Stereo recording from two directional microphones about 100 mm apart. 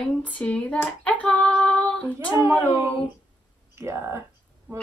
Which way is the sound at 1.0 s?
15° left (ahead or behind).